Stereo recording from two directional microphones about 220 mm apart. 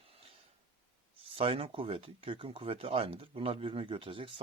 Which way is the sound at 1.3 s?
25° right (ahead or behind).